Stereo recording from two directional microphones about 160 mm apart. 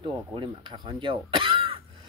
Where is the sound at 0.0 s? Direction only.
30° right (ahead or behind).